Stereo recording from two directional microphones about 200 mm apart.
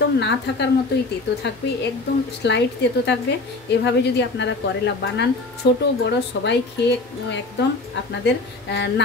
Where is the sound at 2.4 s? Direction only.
60° left (ahead or behind).